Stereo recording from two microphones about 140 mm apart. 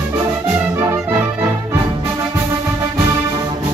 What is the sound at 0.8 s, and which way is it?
Music, 20° right (ahead or behind).